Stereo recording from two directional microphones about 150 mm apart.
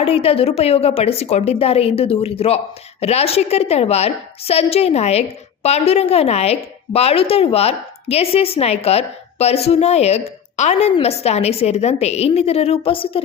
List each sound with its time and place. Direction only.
0.0 s a woman's voice: 40° left (ahead or behind)